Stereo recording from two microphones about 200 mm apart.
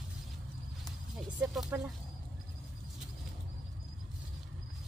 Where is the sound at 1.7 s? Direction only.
10° right (ahead or behind).